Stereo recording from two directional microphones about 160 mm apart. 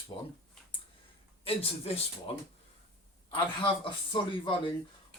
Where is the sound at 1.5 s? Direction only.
40° left (ahead or behind).